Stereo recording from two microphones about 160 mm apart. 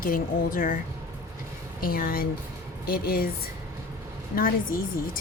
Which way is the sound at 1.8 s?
65° left (ahead or behind).